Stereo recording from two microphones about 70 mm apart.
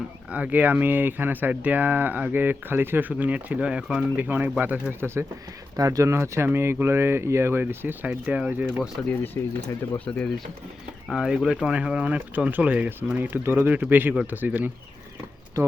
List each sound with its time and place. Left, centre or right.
0.3 s speech: right
5.7 s speech: right
6.1 s speech: right; by 8.6 s centre
9.0 s speech: centre
9.4 s speech: left
11.1 s speech: centre; by 14.7 s right